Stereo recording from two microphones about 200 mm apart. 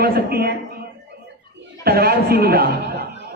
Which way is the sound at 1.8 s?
50° right (ahead or behind).